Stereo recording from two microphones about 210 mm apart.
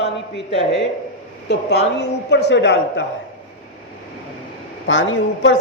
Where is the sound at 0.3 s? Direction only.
55° left (ahead or behind).